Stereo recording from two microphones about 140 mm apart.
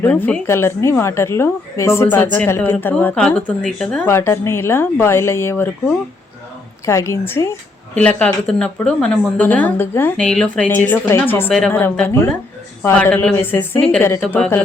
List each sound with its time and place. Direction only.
0.0 s a woman's voice: 15° left (ahead or behind)
4.1 s a woman's voice: 20° left (ahead or behind)
6.8 s a woman's voice: 20° left (ahead or behind)
7.9 s a woman's voice: 10° left (ahead or behind)